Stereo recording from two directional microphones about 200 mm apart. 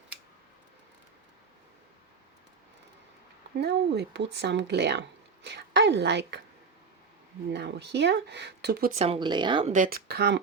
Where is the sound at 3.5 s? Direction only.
60° right (ahead or behind).